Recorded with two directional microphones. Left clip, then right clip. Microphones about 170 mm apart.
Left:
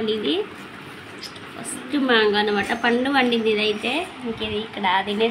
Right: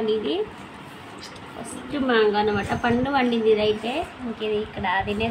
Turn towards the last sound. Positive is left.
turn(degrees=15)  # may be behind; listen again after turning